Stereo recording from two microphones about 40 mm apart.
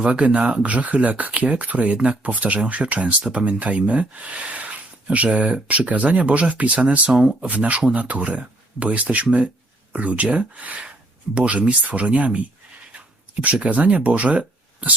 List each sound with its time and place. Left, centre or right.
0.0 s speech: right
7.5 s speech: right
13.4 s speech: right